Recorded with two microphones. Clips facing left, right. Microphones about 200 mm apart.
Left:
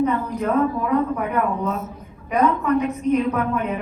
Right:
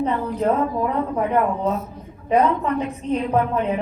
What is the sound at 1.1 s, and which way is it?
Speech, 30° right (ahead or behind).